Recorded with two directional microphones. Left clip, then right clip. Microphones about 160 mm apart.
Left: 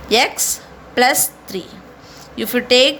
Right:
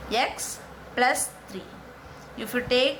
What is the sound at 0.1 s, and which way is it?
A woman's voice, 50° left (ahead or behind).